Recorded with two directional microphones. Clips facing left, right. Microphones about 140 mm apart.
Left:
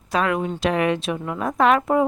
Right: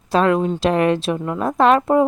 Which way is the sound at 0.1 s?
30° right (ahead or behind).